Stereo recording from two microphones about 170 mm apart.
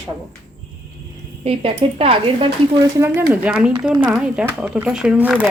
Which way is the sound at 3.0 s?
10° right (ahead or behind).